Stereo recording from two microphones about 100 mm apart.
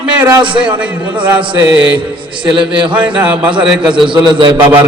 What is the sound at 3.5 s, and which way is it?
A man's voice, 55° right (ahead or behind).